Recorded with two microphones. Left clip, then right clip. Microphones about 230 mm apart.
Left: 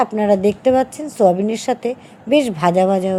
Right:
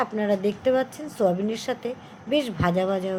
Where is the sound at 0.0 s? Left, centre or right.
Left.